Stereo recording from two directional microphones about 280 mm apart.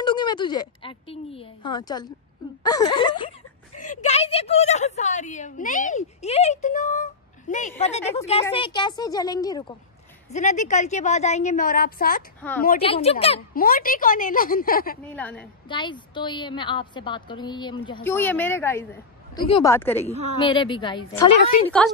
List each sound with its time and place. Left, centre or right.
0.0 s a woman's voice: centre
10.3 s speech: left
12.4 s a woman's voice: centre
12.8 s speech: centre
15.1 s a woman's voice: centre
15.7 s a woman's voice: centre
21.6 s a woman's voice: centre